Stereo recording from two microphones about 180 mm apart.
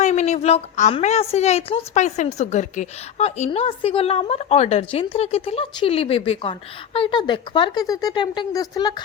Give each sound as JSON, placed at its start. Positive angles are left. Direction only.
{"t": 0.0, "sound": "a woman's voice", "side_deg": 40}